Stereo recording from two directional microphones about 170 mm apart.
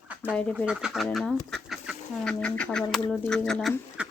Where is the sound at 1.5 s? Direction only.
Centre (ahead or behind).